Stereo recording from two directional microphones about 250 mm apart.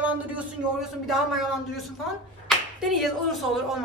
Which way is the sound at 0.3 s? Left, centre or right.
Centre.